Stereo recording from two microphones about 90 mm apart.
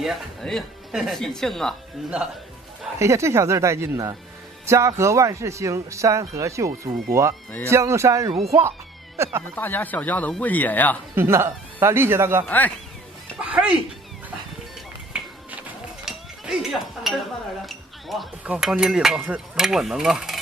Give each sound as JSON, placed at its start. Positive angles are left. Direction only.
{"t": 0.0, "sound": "mechanisms", "side_deg": 0}
{"t": 3.0, "sound": "speech", "side_deg": -30}
{"t": 9.6, "sound": "speech", "side_deg": 20}
{"t": 11.1, "sound": "speech", "side_deg": -30}
{"t": 12.4, "sound": "speech", "side_deg": 20}
{"t": 13.4, "sound": "a sound", "side_deg": -15}
{"t": 15.1, "sound": "a sound", "side_deg": -10}
{"t": 16.1, "sound": "chink", "side_deg": -5}
{"t": 17.1, "sound": "mechanisms", "side_deg": -5}
{"t": 17.6, "sound": "chink", "side_deg": 0}
{"t": 18.6, "sound": "mechanisms", "side_deg": -5}